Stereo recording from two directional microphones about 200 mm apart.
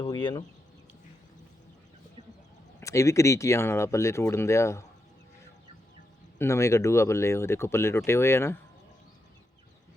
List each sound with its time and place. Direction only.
0.0 s speech: 25° left (ahead or behind)
2.8 s speech: 15° left (ahead or behind)
6.4 s speech: 15° left (ahead or behind)